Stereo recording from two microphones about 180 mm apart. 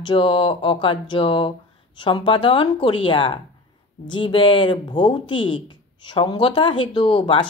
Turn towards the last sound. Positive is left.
turn(degrees=30)  # may be behind; listen again after turning